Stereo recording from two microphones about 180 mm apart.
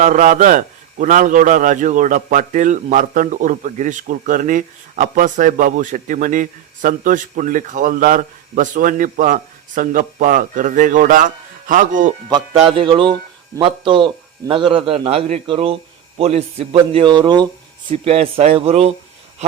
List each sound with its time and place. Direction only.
0.0 s a man's voice: 45° right (ahead or behind)
12.3 s music: 30° right (ahead or behind)
13.6 s a man's voice: 30° right (ahead or behind)